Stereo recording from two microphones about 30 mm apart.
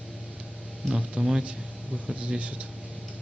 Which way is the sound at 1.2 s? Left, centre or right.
Right.